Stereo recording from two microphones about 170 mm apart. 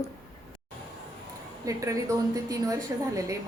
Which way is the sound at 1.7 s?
20° right (ahead or behind).